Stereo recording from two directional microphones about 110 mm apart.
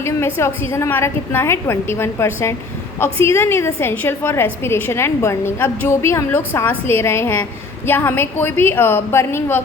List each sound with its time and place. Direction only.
0.0 s a woman's voice: 20° left (ahead or behind)